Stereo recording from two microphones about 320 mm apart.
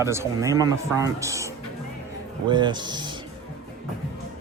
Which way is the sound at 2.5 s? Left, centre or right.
Centre.